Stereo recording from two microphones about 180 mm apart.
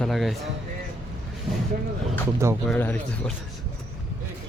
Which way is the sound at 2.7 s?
10° left (ahead or behind).